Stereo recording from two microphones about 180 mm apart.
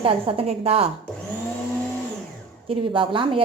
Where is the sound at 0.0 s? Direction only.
35° right (ahead or behind).